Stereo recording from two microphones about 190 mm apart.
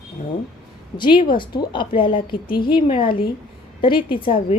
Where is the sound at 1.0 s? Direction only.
25° left (ahead or behind).